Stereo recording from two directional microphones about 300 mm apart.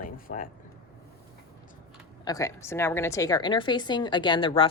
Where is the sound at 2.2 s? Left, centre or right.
Centre.